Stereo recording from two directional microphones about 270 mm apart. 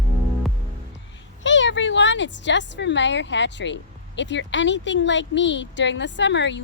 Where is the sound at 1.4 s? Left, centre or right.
Left.